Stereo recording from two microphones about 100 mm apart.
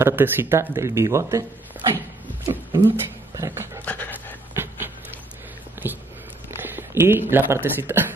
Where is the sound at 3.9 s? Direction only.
20° left (ahead or behind).